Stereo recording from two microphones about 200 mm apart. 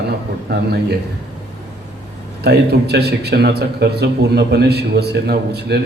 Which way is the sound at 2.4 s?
55° right (ahead or behind).